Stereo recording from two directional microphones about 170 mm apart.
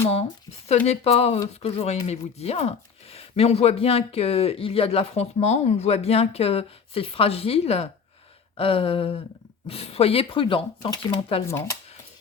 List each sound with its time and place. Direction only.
0.9 s speech: 40° left (ahead or behind)
11.4 s speech: 15° left (ahead or behind)